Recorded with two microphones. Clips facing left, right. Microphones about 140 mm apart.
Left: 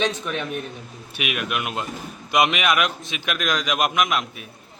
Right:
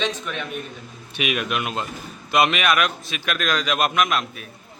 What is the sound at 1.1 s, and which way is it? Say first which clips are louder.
A man's voice: right 2 dB; 5° left (ahead or behind).